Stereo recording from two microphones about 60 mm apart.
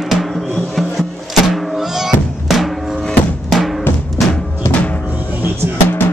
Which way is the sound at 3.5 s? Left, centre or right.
Centre.